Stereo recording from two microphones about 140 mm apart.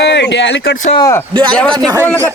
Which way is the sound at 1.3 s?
35° right (ahead or behind).